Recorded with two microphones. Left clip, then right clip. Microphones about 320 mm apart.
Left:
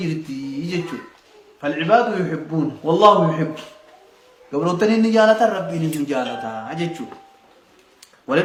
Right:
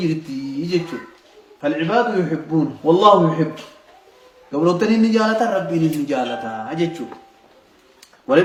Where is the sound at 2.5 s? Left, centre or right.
Centre.